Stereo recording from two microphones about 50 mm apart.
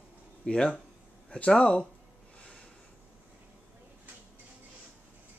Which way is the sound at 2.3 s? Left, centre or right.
Left.